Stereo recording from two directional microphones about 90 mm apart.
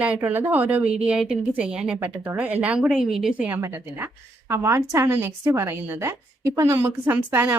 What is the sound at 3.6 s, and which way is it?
A woman's voice, 30° right (ahead or behind).